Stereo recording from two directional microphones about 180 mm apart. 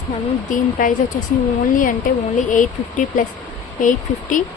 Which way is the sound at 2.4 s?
45° left (ahead or behind).